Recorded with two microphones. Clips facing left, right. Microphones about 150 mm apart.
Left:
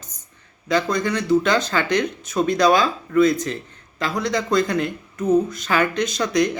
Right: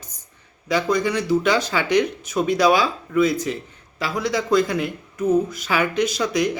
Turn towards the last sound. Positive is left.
turn(degrees=-5)  # may be behind; listen again after turning